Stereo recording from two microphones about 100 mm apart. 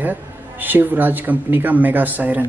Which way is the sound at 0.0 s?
20° right (ahead or behind).